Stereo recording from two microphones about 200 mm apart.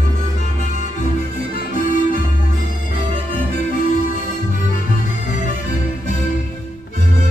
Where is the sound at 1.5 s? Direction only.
45° left (ahead or behind).